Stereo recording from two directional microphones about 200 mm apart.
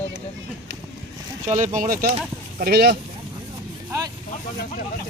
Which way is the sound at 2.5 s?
50° right (ahead or behind).